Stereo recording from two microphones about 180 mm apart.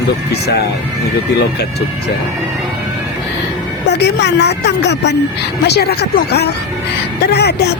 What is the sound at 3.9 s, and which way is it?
Speech, 70° left (ahead or behind).